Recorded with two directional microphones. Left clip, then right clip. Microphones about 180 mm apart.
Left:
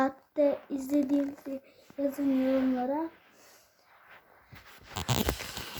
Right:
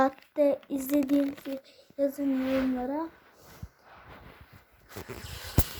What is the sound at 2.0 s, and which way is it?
Speech, 15° right (ahead or behind).